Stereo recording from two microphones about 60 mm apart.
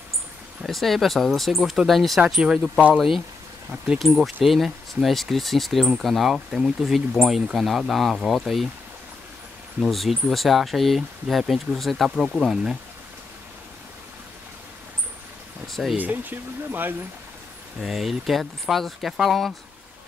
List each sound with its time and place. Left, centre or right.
0.7 s speech: centre
2.2 s speech: centre
4.0 s speech: centre
9.8 s speech: centre
15.6 s speech: centre
16.0 s speech: right
17.7 s speech: centre